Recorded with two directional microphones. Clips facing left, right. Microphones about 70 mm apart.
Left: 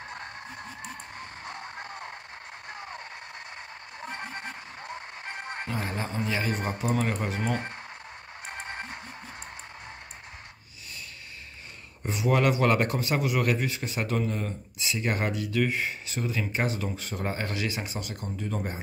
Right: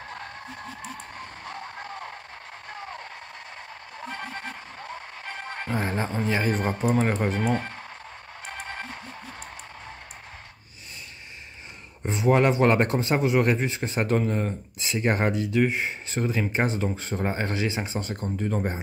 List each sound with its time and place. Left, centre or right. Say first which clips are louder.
1.4 s a sound: right 2 dB; left
4.1 s music: right 2 dB; left
5.7 s a man's voice: right 6 dB; right
7.5 s speech: right 4 dB; left
8.5 s music: right 1 dB; left
12.1 s a man's voice: right 4 dB; right
16.1 s a man's voice: right 4 dB; right